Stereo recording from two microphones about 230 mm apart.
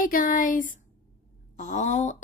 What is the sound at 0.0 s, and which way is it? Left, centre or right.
Speech, left.